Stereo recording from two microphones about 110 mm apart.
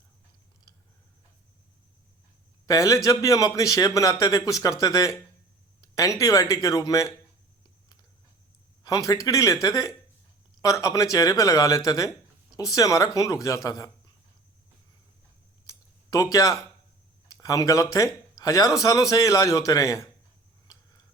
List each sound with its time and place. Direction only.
2.6 s a man's voice: 30° left (ahead or behind)
8.8 s a man's voice: 35° left (ahead or behind)
15.6 s a sound: 30° left (ahead or behind)
17.4 s a man's voice: 30° left (ahead or behind)